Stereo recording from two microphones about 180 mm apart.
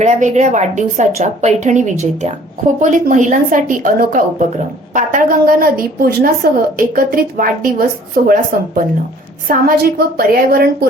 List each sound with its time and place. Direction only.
0.0 s a woman's voice: 40° right (ahead or behind); by 10.8 s 55° right (ahead or behind)